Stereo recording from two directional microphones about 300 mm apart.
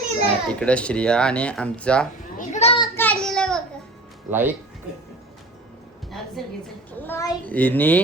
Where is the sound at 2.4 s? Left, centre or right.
Left.